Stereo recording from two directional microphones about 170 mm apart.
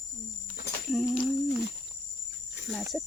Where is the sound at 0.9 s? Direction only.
Centre (ahead or behind).